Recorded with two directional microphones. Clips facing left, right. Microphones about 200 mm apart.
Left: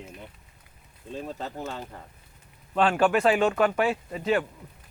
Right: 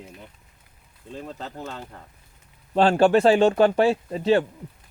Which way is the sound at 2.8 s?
30° right (ahead or behind).